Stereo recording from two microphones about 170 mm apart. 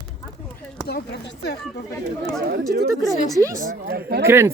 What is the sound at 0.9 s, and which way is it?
Speech, 70° left (ahead or behind).